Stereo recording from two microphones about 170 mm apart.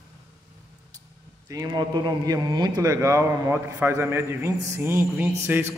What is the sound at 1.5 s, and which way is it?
A man's voice, 20° right (ahead or behind).